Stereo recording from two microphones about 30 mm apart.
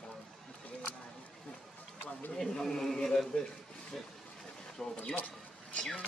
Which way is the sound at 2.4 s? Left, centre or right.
Centre.